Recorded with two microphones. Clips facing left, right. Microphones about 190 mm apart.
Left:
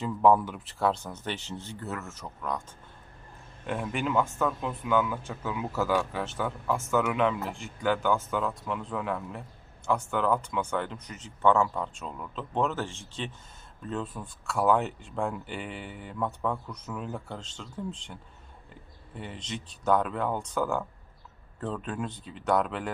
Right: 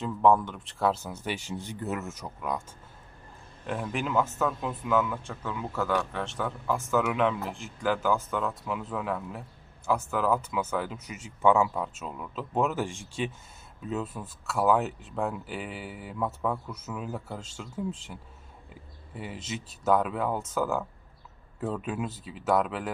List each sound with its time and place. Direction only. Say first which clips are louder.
0.0 s speech: even; 5° left (ahead or behind)
3.7 s speech: left 1 dB; centre (ahead or behind)